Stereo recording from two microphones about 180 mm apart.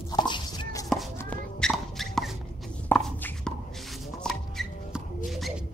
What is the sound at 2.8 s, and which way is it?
Music, 5° left (ahead or behind).